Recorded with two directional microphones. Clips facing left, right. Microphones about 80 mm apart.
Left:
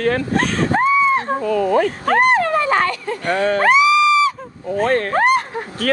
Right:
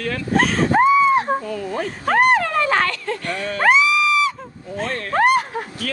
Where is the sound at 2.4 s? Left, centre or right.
Centre.